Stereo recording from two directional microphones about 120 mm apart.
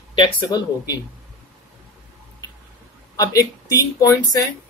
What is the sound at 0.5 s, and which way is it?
Speech, 35° left (ahead or behind).